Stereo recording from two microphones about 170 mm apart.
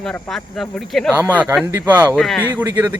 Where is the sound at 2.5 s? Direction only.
10° right (ahead or behind).